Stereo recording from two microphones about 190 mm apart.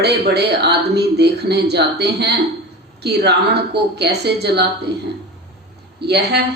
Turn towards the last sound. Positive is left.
turn(degrees=-60)  # may be behind; listen again after turning